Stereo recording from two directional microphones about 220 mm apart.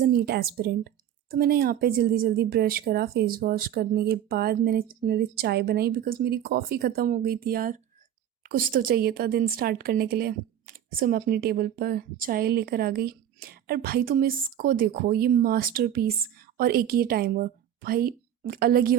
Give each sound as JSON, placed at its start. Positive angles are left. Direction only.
{"t": 0.0, "sound": "a woman's voice", "side_deg": -45}